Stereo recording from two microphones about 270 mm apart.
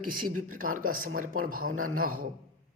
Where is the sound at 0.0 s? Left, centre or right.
Right.